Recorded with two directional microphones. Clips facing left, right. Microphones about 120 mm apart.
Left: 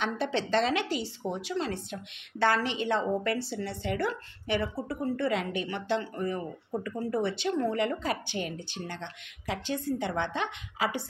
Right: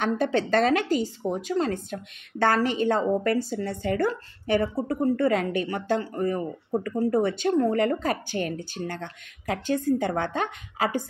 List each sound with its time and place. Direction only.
0.0 s a woman's voice: 45° right (ahead or behind)